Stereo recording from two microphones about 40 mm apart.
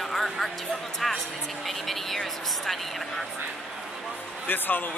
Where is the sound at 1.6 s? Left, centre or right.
Centre.